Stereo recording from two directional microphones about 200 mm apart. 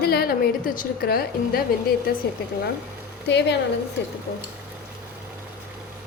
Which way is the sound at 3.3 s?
60° left (ahead or behind).